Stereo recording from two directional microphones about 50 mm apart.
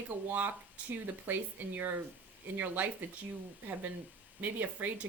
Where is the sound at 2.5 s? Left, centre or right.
Right.